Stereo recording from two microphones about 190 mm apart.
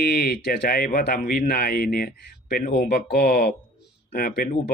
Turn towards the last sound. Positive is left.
turn(degrees=50)  # may be behind; listen again after turning